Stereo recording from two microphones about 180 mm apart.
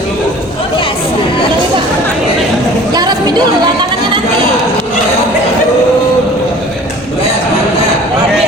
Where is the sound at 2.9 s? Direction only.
20° right (ahead or behind).